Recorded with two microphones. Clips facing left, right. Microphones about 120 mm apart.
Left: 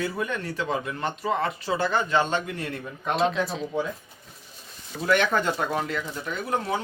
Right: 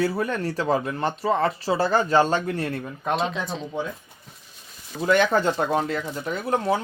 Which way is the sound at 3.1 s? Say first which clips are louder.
Left 4 dB; centre (ahead or behind).